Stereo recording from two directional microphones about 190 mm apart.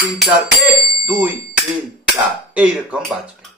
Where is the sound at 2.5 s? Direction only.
5° right (ahead or behind).